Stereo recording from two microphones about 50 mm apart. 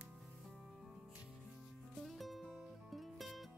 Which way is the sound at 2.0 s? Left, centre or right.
Centre.